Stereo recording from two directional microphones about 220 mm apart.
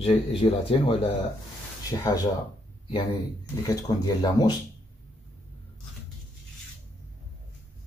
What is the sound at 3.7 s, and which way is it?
Speech, 15° left (ahead or behind).